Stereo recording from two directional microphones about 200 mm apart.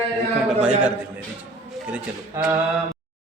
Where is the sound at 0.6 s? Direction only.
5° right (ahead or behind).